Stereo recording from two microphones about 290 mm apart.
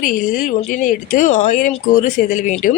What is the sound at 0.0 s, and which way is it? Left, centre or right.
Speech, left.